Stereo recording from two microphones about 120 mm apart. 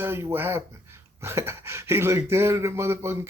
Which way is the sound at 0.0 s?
20° right (ahead or behind).